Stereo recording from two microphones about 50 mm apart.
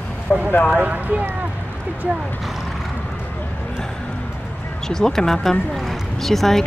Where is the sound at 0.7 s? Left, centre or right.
Right.